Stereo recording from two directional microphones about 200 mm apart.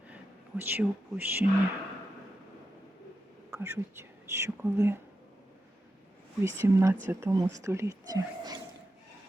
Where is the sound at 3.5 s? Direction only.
15° right (ahead or behind).